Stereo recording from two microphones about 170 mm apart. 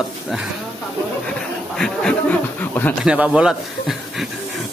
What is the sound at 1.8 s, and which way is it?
Speech, 5° left (ahead or behind).